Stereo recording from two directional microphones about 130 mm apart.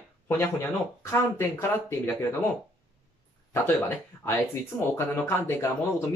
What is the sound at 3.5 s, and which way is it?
Speech, 20° left (ahead or behind).